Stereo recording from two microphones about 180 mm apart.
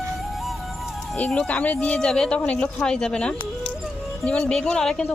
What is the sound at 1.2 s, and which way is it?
Speech, 5° left (ahead or behind).